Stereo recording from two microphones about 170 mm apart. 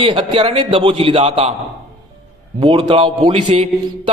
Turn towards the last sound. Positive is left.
turn(degrees=-35)  # may be behind; listen again after turning